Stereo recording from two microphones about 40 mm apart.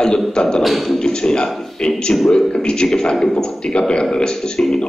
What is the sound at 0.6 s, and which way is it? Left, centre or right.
Speech, centre.